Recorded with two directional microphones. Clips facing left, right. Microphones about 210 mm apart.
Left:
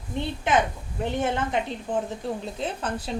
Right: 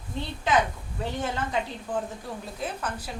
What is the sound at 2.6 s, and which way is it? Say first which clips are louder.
Speech: left 1 dB; 30° left (ahead or behind).